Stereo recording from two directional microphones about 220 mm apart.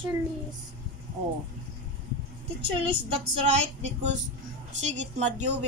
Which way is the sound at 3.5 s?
30° right (ahead or behind).